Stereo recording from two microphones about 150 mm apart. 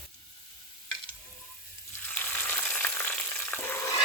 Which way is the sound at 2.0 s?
10° left (ahead or behind).